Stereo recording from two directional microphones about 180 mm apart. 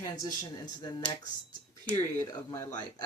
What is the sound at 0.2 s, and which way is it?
Speech, 25° left (ahead or behind).